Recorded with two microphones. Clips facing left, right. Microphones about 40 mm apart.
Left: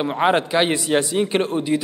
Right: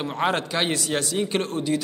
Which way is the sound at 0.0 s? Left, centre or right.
Left.